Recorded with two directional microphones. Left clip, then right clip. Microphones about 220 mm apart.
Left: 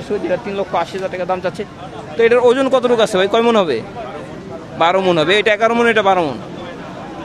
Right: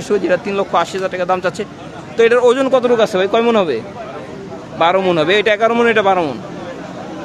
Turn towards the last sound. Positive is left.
turn(degrees=5)  # may be behind; listen again after turning